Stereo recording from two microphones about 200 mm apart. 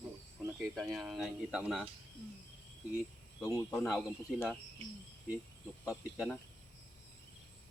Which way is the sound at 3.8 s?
Centre (ahead or behind).